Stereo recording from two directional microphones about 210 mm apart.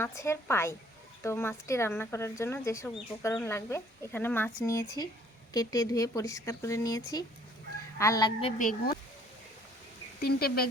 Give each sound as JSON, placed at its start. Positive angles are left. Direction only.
{"t": 0.0, "sound": "speech", "side_deg": 15}
{"t": 8.4, "sound": "speech", "side_deg": 35}
{"t": 10.2, "sound": "speech", "side_deg": 45}